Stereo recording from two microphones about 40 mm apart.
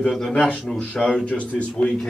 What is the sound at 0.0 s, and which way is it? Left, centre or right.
Speech, centre.